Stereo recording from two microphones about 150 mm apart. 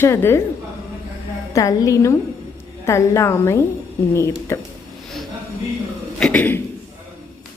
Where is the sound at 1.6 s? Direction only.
20° left (ahead or behind).